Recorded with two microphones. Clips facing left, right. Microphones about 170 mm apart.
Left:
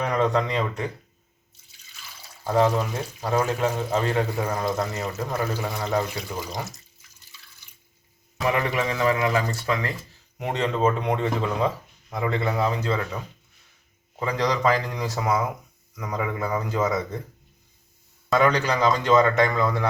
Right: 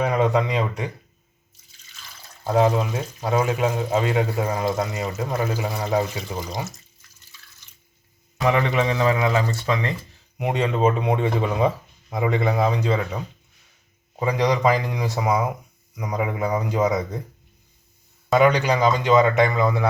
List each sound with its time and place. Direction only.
0.0 s speech: 10° right (ahead or behind)
2.4 s speech: 10° right (ahead or behind)
8.4 s speech: 25° right (ahead or behind)
18.3 s speech: 10° right (ahead or behind)